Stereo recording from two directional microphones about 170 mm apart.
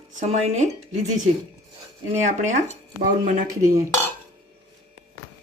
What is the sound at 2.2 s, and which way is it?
Speech, 45° right (ahead or behind).